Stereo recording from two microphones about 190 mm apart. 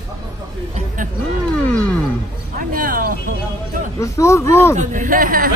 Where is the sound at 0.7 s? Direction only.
45° right (ahead or behind).